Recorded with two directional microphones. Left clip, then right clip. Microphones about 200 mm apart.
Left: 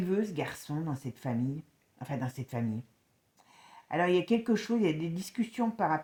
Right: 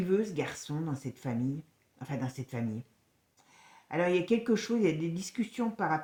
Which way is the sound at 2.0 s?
40° left (ahead or behind).